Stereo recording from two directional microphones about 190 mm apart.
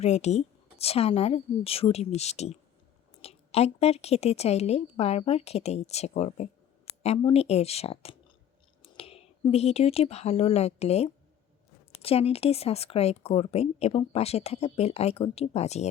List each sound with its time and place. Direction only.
0.0 s speech: 35° left (ahead or behind)